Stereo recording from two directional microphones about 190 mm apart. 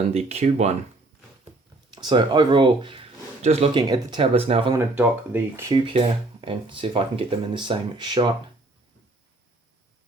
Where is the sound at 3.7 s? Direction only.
20° right (ahead or behind).